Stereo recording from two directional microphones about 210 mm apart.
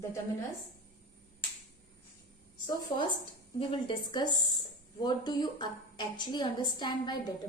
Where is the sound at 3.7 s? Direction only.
20° left (ahead or behind).